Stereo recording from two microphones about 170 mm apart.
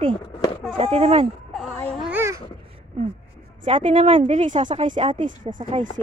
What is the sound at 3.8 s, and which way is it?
Speech, 45° right (ahead or behind).